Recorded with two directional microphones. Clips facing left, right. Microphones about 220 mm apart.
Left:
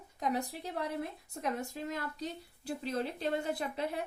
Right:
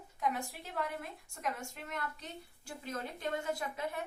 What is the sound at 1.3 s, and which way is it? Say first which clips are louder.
A woman's voice: left 2 dB; 35° left (ahead or behind).